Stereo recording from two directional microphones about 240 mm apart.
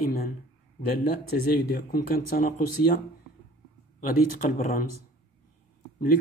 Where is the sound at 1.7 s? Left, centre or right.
Left.